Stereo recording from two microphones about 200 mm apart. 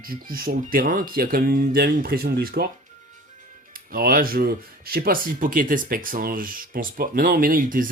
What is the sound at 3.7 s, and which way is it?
Speech, 45° right (ahead or behind).